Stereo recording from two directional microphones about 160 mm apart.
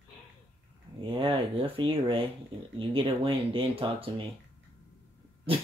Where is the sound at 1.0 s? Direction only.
30° right (ahead or behind).